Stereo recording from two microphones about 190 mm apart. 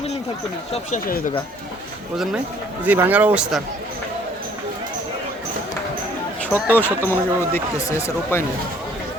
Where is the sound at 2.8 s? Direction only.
10° right (ahead or behind).